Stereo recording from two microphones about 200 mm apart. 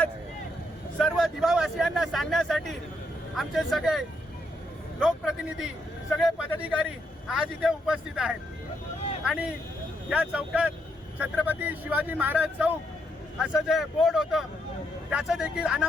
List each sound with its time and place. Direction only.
0.9 s a man's voice: centre (ahead or behind)